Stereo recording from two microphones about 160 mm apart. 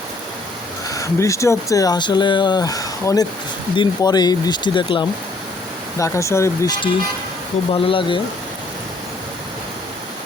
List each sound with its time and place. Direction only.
0.9 s speech: 20° left (ahead or behind)
6.0 s speech: 20° left (ahead or behind)
7.7 s speech: 35° left (ahead or behind)